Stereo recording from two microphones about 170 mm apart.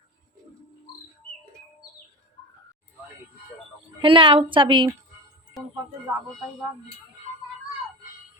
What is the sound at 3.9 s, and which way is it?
Speech, 30° right (ahead or behind).